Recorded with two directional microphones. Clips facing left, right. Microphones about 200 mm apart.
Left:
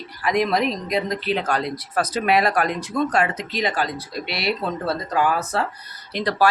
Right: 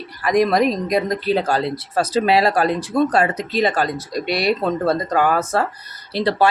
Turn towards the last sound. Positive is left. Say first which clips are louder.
# right 3 dB
turn(degrees=-25)  # may be behind; listen again after turning